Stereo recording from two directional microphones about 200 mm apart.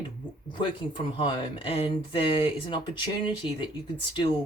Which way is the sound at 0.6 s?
25° left (ahead or behind).